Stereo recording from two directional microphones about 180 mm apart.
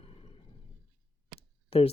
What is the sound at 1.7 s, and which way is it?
Speech, 35° left (ahead or behind).